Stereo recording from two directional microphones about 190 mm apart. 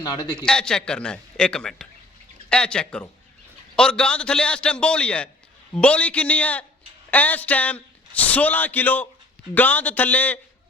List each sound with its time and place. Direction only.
0.0 s a man's voice: 20° left (ahead or behind)
0.3 s a man's voice: 5° left (ahead or behind)